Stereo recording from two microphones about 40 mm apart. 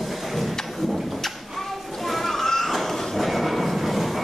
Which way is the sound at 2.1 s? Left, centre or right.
Centre.